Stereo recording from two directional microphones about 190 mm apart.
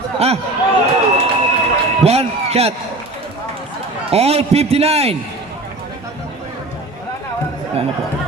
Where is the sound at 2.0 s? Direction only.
35° right (ahead or behind).